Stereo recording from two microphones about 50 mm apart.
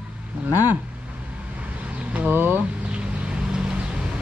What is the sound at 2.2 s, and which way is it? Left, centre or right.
Speech, right.